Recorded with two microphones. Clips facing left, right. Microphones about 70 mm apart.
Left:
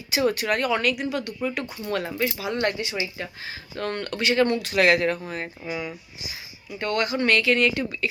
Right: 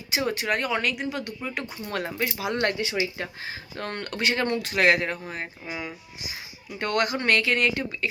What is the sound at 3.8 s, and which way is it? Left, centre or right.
Speech, right.